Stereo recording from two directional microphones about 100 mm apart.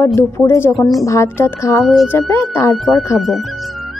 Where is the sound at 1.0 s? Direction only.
30° left (ahead or behind).